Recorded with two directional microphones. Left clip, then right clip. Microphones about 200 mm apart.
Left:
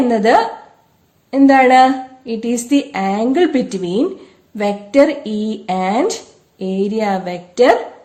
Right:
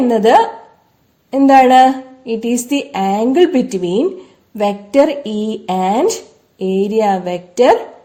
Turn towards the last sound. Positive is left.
turn(degrees=-40)  # may be behind; listen again after turning